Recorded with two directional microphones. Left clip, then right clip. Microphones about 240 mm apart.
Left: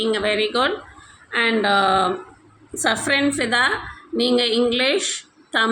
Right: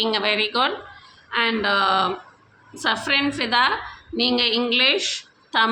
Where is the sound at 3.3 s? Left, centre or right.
Centre.